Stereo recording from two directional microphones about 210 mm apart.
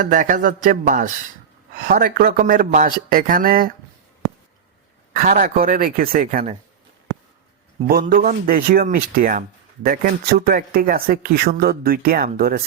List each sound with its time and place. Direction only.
0.0 s speech: 40° right (ahead or behind)
5.1 s speech: 45° right (ahead or behind)
7.9 s speech: 45° right (ahead or behind)